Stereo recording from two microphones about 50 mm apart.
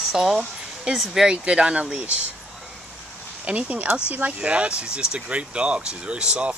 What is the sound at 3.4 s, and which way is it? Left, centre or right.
Speech, right.